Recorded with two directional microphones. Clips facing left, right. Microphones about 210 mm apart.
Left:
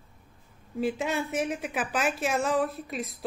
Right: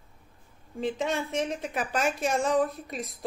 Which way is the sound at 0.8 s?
5° left (ahead or behind).